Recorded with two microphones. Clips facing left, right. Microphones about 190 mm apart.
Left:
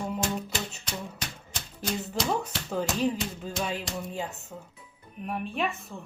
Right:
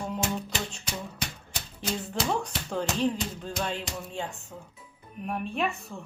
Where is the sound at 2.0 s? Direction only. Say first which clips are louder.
Even; 5° left (ahead or behind).